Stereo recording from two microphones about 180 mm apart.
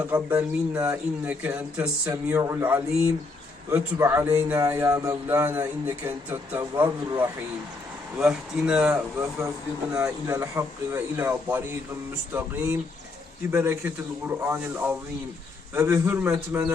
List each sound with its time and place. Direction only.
0.1 s a man's voice: 10° right (ahead or behind)
8.2 s speech: 5° right (ahead or behind)
9.9 s a man's voice: 15° right (ahead or behind)